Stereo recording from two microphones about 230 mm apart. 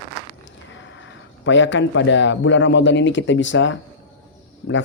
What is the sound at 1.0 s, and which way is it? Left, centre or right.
A man's voice, left.